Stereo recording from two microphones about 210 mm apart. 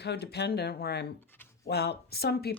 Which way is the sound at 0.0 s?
50° left (ahead or behind).